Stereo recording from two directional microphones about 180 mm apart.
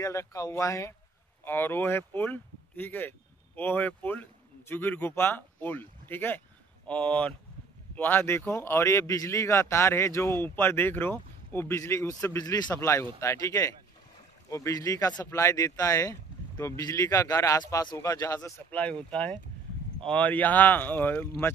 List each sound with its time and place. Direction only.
0.0 s speech: 15° left (ahead or behind)